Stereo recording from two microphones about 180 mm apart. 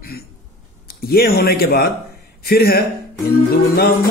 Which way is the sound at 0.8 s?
60° left (ahead or behind).